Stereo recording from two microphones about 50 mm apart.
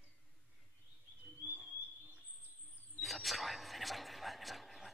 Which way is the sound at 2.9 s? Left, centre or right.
Centre.